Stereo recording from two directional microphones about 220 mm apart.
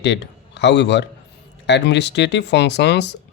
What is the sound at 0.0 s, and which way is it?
A man's voice, 50° left (ahead or behind).